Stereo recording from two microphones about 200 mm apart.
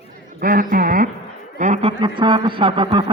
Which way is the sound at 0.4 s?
45° right (ahead or behind).